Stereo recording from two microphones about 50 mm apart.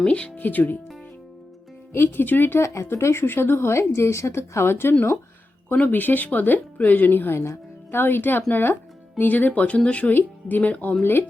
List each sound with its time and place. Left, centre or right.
0.1 s speech: left
0.3 s speech: left
1.9 s speech: left
2.6 s speech: left
2.8 s speech: left
5.7 s speech: left
11.0 s speech: left